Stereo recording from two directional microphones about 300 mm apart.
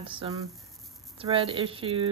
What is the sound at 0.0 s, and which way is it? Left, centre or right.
Speech, centre.